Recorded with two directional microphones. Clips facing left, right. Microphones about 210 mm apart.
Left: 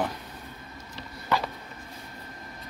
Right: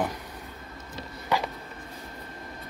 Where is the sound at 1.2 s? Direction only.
15° right (ahead or behind).